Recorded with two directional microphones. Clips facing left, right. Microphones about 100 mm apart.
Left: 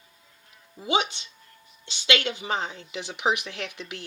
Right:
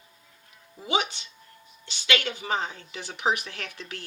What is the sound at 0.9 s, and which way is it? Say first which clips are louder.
A woman's voice: left 2 dB; 25° left (ahead or behind).